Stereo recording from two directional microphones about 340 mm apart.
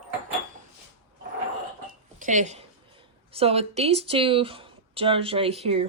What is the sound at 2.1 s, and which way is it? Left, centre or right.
Speech, right.